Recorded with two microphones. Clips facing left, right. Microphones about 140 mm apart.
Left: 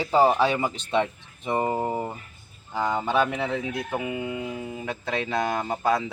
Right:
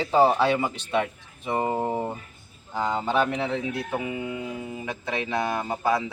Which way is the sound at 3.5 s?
20° right (ahead or behind).